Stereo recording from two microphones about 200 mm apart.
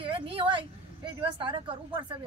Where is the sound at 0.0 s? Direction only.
25° right (ahead or behind).